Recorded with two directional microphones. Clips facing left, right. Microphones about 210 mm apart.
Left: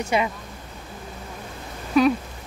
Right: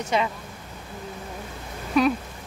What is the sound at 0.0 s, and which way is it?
Speech, 10° left (ahead or behind).